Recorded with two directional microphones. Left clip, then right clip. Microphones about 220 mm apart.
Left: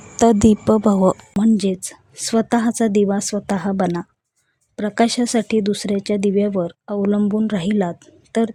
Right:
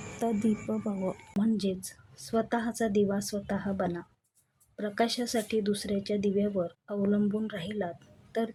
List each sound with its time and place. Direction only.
0.2 s speech: 45° left (ahead or behind)